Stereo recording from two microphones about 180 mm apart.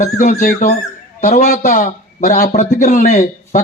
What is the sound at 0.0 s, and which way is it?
A man's voice, 45° left (ahead or behind).